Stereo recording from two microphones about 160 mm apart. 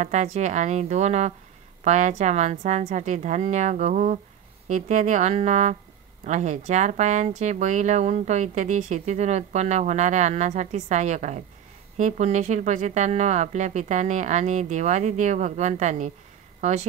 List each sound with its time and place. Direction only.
0.0 s speech: 45° right (ahead or behind)